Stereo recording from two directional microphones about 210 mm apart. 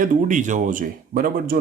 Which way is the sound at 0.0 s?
35° right (ahead or behind).